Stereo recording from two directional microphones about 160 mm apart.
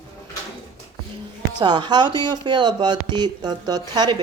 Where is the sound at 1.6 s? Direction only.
30° right (ahead or behind).